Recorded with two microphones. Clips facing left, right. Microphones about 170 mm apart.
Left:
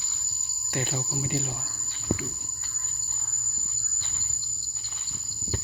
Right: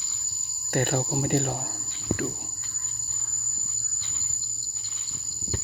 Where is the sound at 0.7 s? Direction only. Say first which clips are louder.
Right 6 dB; 60° right (ahead or behind).